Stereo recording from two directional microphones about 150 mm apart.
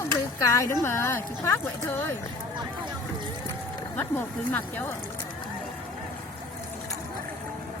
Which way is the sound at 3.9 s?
10° left (ahead or behind).